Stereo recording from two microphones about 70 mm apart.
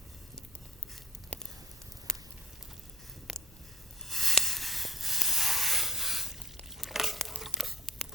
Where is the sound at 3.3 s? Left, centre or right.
Centre.